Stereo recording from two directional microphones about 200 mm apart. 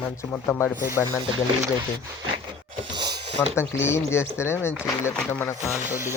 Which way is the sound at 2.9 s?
20° right (ahead or behind).